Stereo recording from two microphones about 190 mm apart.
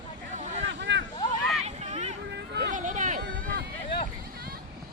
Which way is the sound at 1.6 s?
35° right (ahead or behind).